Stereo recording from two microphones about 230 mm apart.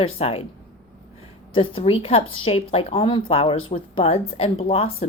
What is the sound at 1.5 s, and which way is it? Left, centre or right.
Speech, left.